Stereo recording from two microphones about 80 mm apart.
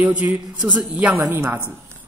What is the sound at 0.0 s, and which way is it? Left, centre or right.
A man's voice, centre.